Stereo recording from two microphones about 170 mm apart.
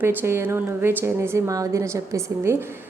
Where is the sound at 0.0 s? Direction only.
10° right (ahead or behind).